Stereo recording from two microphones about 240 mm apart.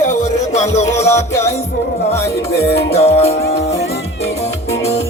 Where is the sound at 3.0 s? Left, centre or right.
Left.